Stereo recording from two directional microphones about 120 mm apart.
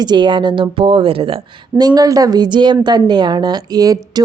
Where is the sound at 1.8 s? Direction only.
30° right (ahead or behind).